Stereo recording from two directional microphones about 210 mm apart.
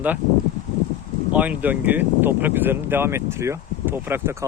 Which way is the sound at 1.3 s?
5° right (ahead or behind).